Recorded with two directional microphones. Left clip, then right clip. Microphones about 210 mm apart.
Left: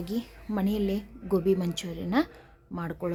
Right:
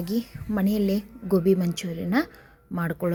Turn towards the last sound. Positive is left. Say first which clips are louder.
# right 5 dB
turn(degrees=-15)  # may be behind; listen again after turning